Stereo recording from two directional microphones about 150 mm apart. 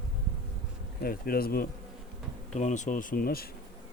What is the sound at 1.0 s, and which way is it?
Bee, 90° left.